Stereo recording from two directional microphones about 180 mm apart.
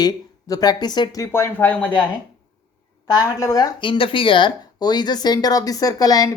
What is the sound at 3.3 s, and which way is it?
Speech, 20° left (ahead or behind).